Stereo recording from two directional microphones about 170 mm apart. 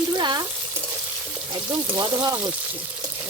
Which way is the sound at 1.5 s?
25° right (ahead or behind).